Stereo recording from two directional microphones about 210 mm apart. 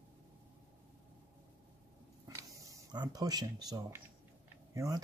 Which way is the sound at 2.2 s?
15° right (ahead or behind).